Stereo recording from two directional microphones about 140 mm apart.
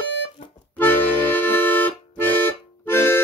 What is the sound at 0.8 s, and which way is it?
Music, 15° left (ahead or behind).